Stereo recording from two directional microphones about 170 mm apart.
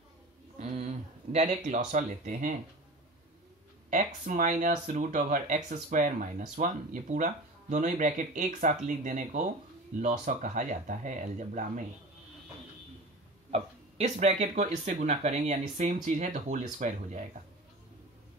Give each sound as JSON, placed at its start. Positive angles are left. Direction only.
{"t": 0.6, "sound": "a sound", "side_deg": -45}
{"t": 1.3, "sound": "speech", "side_deg": -45}
{"t": 3.9, "sound": "speech", "side_deg": -50}
{"t": 13.5, "sound": "speech", "side_deg": -40}